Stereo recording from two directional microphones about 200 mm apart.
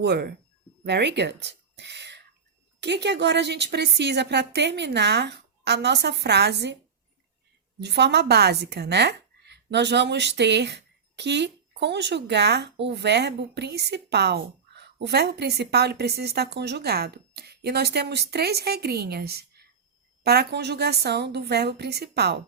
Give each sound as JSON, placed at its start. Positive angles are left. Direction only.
{"t": 0.0, "sound": "speech", "side_deg": -55}
{"t": 7.8, "sound": "speech", "side_deg": -60}